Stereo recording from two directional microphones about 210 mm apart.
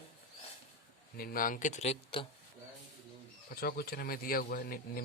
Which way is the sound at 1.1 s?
45° left (ahead or behind).